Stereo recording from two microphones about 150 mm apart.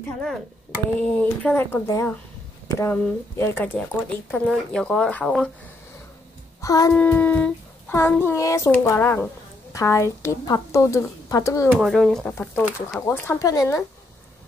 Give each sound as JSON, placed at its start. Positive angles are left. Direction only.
{"t": 0.9, "sound": "child singing", "side_deg": 5}
{"t": 4.5, "sound": "speech", "side_deg": 5}
{"t": 6.6, "sound": "music", "side_deg": 25}
{"t": 6.9, "sound": "child singing", "side_deg": 10}
{"t": 9.7, "sound": "a woman's voice", "side_deg": 20}
{"t": 11.8, "sound": "speech", "side_deg": 0}
{"t": 12.4, "sound": "child singing", "side_deg": 15}